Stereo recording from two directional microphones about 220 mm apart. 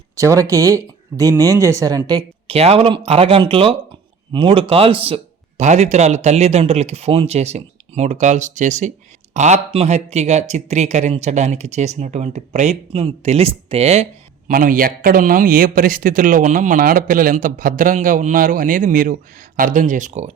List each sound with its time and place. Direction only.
0.2 s speech: 15° right (ahead or behind); by 20.3 s 35° right (ahead or behind)